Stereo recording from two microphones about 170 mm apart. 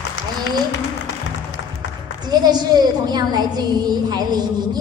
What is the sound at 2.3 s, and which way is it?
A woman's voice, 25° right (ahead or behind).